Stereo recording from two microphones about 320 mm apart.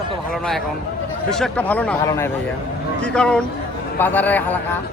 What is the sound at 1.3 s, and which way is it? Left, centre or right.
Speech, centre.